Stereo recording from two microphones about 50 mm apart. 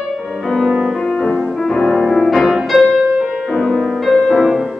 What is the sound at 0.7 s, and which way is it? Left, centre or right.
Music, centre.